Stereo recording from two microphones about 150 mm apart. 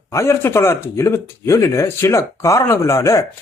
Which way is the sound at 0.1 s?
15° left (ahead or behind).